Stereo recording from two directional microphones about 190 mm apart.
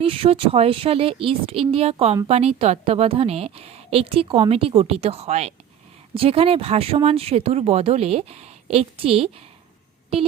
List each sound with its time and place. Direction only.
0.0 s a woman's voice: 30° right (ahead or behind)